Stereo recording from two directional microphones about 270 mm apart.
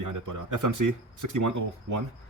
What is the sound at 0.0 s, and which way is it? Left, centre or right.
Speech, right.